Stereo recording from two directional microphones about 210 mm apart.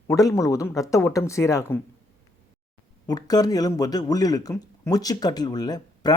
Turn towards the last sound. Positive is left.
turn(degrees=20)  # may be behind; listen again after turning